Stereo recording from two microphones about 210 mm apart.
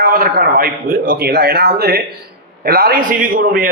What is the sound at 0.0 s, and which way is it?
A man's voice, 45° right (ahead or behind).